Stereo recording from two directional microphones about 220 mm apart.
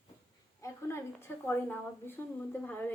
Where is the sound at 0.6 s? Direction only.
10° left (ahead or behind).